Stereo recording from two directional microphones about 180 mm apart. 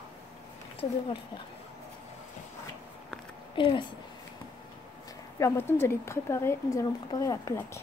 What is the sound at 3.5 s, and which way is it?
Speech, 25° left (ahead or behind).